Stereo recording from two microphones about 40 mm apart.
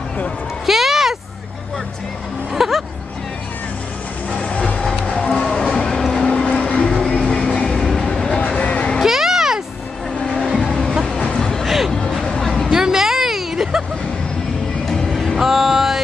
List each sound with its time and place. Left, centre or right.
0.7 s a sound: centre
2.5 s music: centre
4.3 s music: left
6.2 s vehicle: left
6.9 s vehicle: centre
8.5 s music: left
9.0 s vehicle: centre
10.7 s music: centre
11.3 s a sound: centre
11.6 s music: centre
11.9 s a sound: centre
12.7 s vehicle: centre
14.9 s music: centre